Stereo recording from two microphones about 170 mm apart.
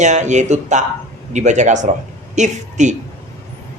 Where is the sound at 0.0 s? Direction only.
45° right (ahead or behind).